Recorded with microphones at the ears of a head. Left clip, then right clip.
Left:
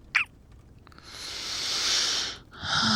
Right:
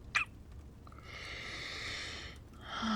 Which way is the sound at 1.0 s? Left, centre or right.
Left.